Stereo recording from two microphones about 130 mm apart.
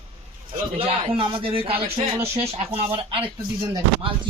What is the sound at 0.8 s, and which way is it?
Speech, 45° right (ahead or behind).